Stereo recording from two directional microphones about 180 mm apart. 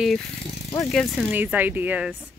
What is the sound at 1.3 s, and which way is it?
Speech, 10° right (ahead or behind).